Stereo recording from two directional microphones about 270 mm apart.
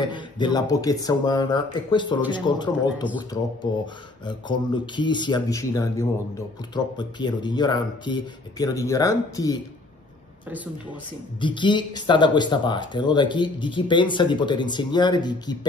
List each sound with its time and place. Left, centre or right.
0.0 s speech: centre
11.4 s speech: centre